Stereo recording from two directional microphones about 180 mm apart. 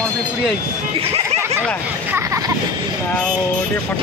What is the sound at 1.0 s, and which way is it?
Speech, 30° right (ahead or behind).